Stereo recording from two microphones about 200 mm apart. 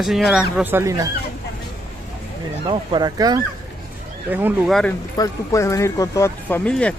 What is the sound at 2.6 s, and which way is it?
Speech, 20° right (ahead or behind).